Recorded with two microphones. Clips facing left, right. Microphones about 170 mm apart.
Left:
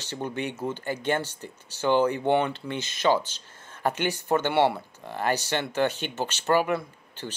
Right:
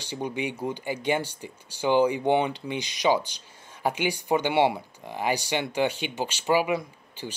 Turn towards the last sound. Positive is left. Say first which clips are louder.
# even
turn(degrees=-10)  # may be behind; listen again after turning